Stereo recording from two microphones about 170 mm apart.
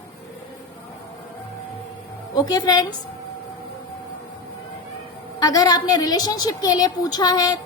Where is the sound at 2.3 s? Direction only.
25° left (ahead or behind).